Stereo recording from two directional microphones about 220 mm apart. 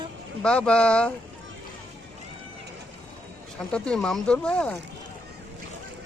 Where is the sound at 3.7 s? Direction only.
5° left (ahead or behind).